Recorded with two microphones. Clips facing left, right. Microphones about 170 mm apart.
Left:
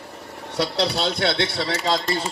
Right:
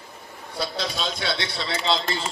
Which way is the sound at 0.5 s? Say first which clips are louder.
Left 6 dB; 70° left (ahead or behind).